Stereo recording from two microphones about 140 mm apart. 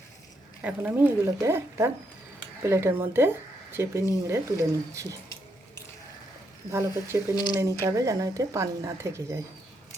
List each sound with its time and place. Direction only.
0.6 s speech: 10° right (ahead or behind)
6.7 s speech: 20° right (ahead or behind)
7.3 s speech: 30° left (ahead or behind)
7.6 s speech: 25° right (ahead or behind)